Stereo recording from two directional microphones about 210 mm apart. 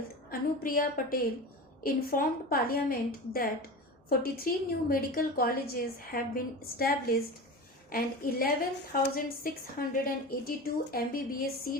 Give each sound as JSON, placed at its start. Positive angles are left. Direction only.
{"t": 0.3, "sound": "a woman's voice", "side_deg": 45}